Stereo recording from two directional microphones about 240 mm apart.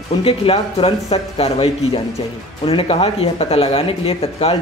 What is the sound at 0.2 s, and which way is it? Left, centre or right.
Speech, left.